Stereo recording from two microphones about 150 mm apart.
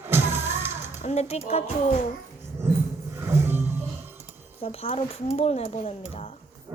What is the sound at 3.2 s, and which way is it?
Music, 15° right (ahead or behind).